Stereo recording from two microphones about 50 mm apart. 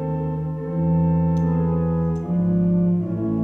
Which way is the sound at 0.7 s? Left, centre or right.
Centre.